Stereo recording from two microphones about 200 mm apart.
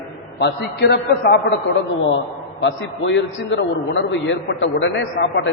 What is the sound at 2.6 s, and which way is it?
A man's voice, 65° left (ahead or behind).